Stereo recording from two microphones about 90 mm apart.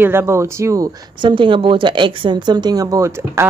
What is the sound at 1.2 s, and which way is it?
Speech, 65° right (ahead or behind).